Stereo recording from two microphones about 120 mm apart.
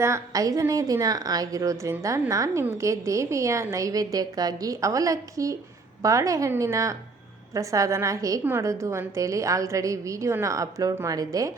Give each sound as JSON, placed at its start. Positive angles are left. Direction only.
{"t": 0.0, "sound": "a woman's voice", "side_deg": -25}